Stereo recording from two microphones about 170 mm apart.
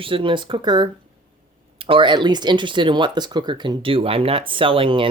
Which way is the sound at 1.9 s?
30° right (ahead or behind).